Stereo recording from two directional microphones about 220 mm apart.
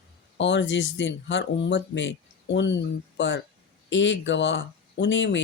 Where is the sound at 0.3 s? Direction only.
55° left (ahead or behind).